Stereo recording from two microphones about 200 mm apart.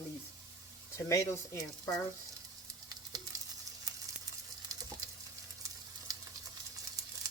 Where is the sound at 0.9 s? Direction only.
15° left (ahead or behind).